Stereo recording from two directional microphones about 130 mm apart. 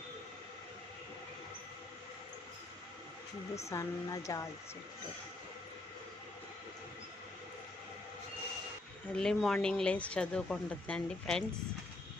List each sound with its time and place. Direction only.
3.5 s speech: 20° left (ahead or behind)
9.1 s speech: 5° left (ahead or behind)